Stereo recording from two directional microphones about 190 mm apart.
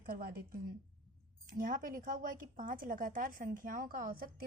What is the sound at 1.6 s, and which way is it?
A woman's voice, 45° right (ahead or behind).